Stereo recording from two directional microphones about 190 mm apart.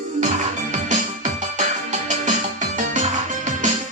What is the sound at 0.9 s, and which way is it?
Music, 40° right (ahead or behind).